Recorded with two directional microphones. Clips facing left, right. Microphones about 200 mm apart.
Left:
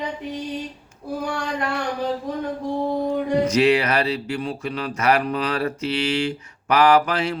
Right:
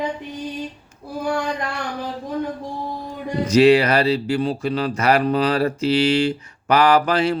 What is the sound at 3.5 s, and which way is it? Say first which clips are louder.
Speech: right 9 dB; 35° right (ahead or behind).